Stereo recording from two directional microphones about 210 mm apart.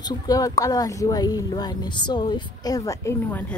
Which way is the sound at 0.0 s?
15° left (ahead or behind).